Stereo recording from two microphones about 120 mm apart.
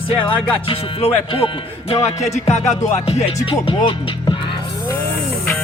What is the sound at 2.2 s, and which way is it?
Music, 70° left (ahead or behind).